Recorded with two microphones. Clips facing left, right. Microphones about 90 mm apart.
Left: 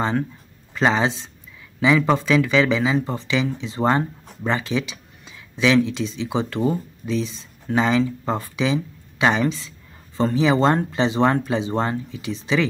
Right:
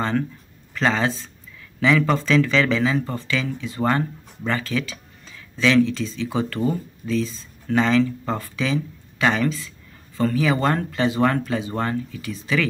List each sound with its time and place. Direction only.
0.7 s speech: 15° left (ahead or behind)